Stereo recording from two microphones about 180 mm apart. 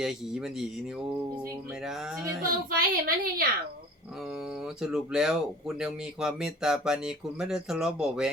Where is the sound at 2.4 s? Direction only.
55° right (ahead or behind).